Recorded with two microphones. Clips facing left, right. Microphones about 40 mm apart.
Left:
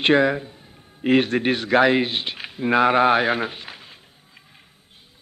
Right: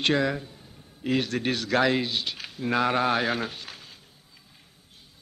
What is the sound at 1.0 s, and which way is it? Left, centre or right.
A man's voice, left.